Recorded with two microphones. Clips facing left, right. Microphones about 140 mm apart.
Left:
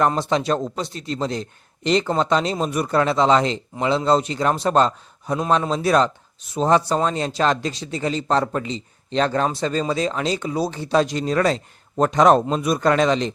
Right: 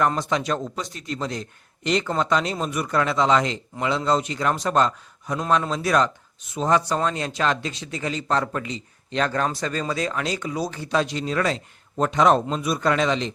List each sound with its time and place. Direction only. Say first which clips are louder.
0.1 s speech: left 4 dB; 30° left (ahead or behind)